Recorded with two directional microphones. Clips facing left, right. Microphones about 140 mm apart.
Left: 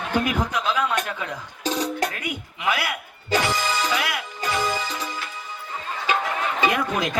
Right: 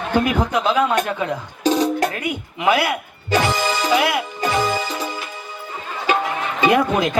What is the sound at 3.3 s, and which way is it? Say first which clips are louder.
Music: right 4 dB; 25° right (ahead or behind).